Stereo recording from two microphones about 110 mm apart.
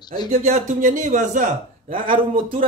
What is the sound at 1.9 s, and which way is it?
Speech, 55° right (ahead or behind).